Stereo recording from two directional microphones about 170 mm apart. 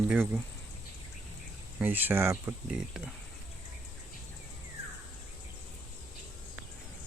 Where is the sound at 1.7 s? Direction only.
10° right (ahead or behind).